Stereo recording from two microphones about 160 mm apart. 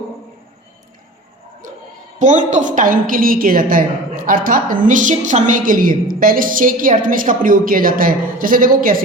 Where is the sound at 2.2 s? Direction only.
50° right (ahead or behind).